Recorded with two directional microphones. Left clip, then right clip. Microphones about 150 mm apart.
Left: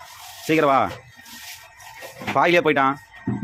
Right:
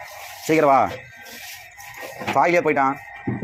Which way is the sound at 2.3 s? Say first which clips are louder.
Even; 25° left (ahead or behind).